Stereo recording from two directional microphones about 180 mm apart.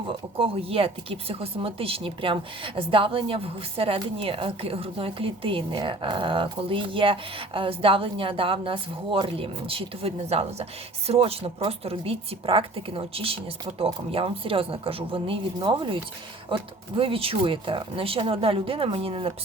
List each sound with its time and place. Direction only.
0.1 s speech: 30° right (ahead or behind)
17.0 s speech: 30° right (ahead or behind)